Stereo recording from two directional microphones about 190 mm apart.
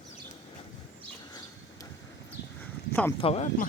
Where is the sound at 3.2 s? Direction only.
35° left (ahead or behind).